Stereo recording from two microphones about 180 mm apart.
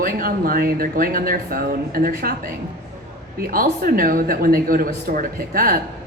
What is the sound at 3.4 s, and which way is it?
Speech, 55° right (ahead or behind).